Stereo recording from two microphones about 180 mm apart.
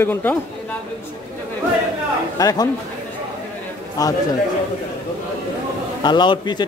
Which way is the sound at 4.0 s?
20° left (ahead or behind).